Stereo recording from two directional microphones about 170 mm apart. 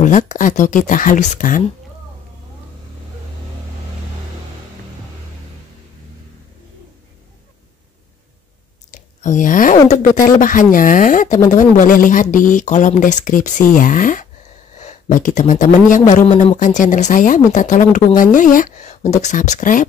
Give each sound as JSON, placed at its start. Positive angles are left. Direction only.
{"t": 0.0, "sound": "speech", "side_deg": 50}
{"t": 8.9, "sound": "a sound", "side_deg": 45}
{"t": 9.8, "sound": "speech", "side_deg": 45}